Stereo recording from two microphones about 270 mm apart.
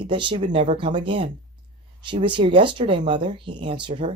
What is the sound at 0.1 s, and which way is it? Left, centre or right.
Speech, centre.